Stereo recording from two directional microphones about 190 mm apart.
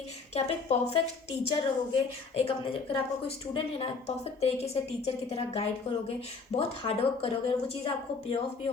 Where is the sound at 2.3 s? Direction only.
30° left (ahead or behind).